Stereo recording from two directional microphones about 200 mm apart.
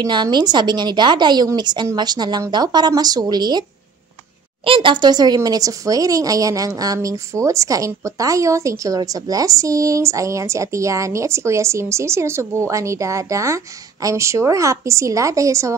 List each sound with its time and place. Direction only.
0.0 s a woman's voice: 20° right (ahead or behind)
4.6 s speech: 25° right (ahead or behind)